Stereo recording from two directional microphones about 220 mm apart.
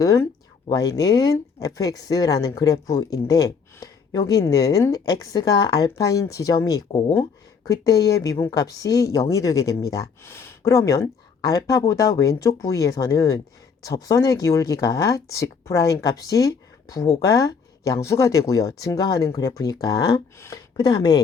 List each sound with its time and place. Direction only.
0.0 s speech: 15° left (ahead or behind)